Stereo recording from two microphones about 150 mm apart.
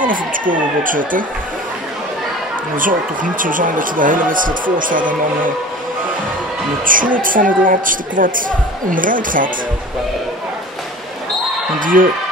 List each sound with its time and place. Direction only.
0.0 s a woman's voice: 65° right (ahead or behind)
2.7 s a woman's voice: 65° right (ahead or behind)
6.8 s a woman's voice: 65° right (ahead or behind)
11.8 s a woman's voice: 65° right (ahead or behind)